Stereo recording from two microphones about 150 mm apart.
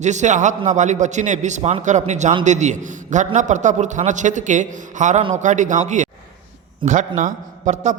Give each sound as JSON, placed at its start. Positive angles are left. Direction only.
{"t": 0.0, "sound": "a man's voice", "side_deg": -50}